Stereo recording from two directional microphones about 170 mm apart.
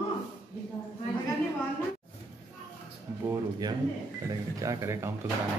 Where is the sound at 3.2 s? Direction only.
20° right (ahead or behind).